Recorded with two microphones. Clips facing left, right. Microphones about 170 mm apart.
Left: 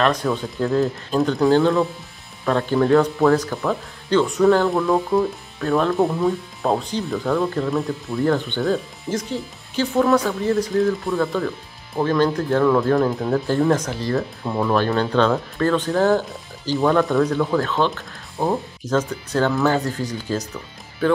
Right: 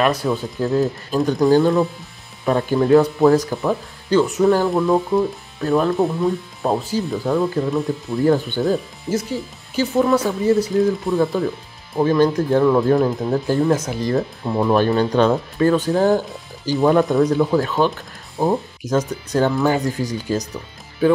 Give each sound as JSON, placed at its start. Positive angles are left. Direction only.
{"t": 0.0, "sound": "speech", "side_deg": -5}
{"t": 1.5, "sound": "speech", "side_deg": -15}
{"t": 3.6, "sound": "speech", "side_deg": -5}
{"t": 7.1, "sound": "speech", "side_deg": -20}
{"t": 7.7, "sound": "speech", "side_deg": 0}
{"t": 8.3, "sound": "speech", "side_deg": -15}
{"t": 9.1, "sound": "speech", "side_deg": 0}